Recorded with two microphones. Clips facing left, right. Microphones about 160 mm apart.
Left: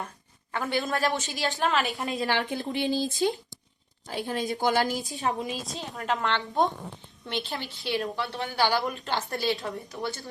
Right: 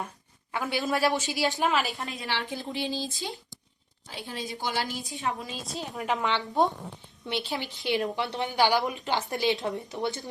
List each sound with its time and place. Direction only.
0.5 s a woman's voice: 5° right (ahead or behind)
2.1 s a woman's voice: 50° left (ahead or behind)
5.2 s a woman's voice: 35° left (ahead or behind)
5.7 s a woman's voice: centre (ahead or behind); by 10.2 s 20° right (ahead or behind)